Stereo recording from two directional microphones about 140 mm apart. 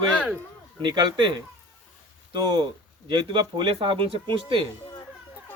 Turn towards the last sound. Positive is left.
turn(degrees=-40)  # may be behind; listen again after turning